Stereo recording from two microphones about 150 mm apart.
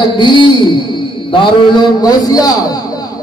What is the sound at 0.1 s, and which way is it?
A man's voice, 30° left (ahead or behind).